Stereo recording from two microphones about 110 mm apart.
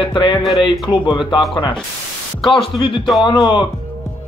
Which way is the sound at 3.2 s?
45° left (ahead or behind).